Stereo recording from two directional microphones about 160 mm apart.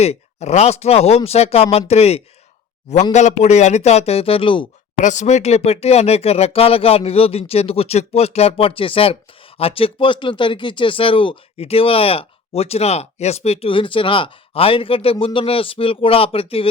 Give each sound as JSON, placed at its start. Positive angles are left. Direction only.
{"t": 0.0, "sound": "speech", "side_deg": 40}
{"t": 4.9, "sound": "speech", "side_deg": 50}